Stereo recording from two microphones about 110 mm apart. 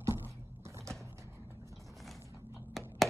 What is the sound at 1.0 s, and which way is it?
Music, 25° right (ahead or behind).